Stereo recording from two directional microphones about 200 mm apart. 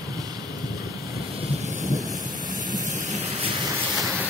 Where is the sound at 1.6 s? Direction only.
35° right (ahead or behind).